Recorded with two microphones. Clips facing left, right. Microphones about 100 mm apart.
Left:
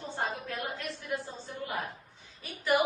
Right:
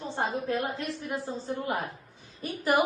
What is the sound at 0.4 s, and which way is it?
A woman's voice, 35° right (ahead or behind).